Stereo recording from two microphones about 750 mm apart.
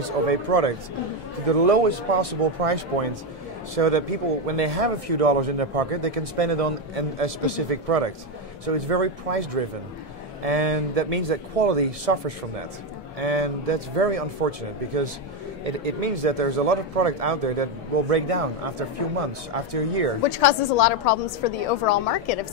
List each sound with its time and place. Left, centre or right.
0.3 s a man's voice: right
15.6 s a man's voice: right
20.2 s a woman's voice: left